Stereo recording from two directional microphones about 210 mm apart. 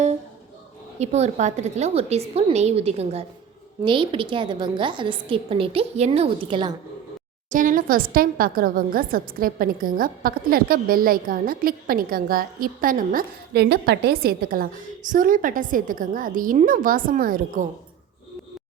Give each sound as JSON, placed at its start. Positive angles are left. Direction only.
{"t": 0.9, "sound": "a woman's voice", "side_deg": -30}
{"t": 7.5, "sound": "a woman's voice", "side_deg": -40}